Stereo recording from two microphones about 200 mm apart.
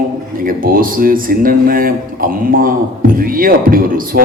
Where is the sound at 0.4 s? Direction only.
45° right (ahead or behind).